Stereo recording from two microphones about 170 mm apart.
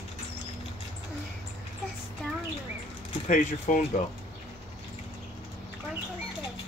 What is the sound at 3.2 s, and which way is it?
Speech, 45° left (ahead or behind).